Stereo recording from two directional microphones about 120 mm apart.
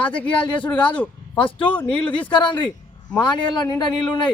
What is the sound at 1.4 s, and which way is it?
Speech, 45° left (ahead or behind).